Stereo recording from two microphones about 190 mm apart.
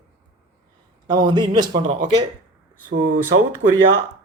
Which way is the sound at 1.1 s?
20° right (ahead or behind).